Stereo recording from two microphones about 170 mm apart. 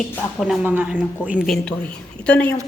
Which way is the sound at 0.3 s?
5° right (ahead or behind).